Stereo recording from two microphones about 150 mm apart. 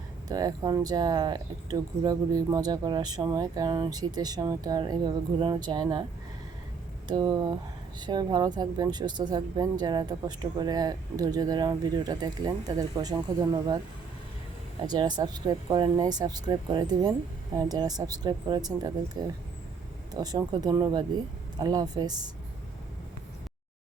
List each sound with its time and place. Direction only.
0.3 s speech: 25° right (ahead or behind)
7.1 s speech: 30° right (ahead or behind)
14.8 s speech: 30° right (ahead or behind)
20.1 s speech: 25° right (ahead or behind)